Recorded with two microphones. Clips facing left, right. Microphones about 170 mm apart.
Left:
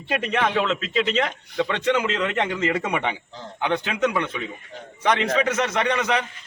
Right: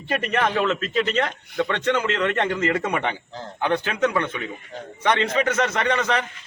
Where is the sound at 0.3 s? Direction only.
10° left (ahead or behind).